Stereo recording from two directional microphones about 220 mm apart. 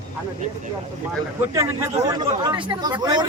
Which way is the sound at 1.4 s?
10° right (ahead or behind).